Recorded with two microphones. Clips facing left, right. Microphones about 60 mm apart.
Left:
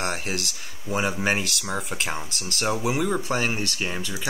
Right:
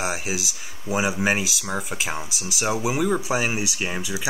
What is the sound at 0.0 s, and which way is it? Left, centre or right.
Speech, centre.